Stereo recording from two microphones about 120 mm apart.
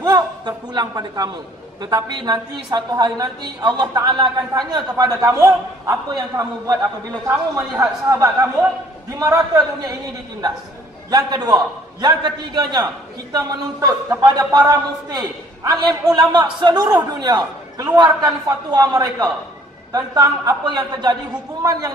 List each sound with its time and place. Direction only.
0.0 s chuckle: 35° right (ahead or behind)
1.8 s a woman's voice: 35° right (ahead or behind)
7.8 s a man's voice: 25° right (ahead or behind)
11.1 s a woman's voice: 35° right (ahead or behind)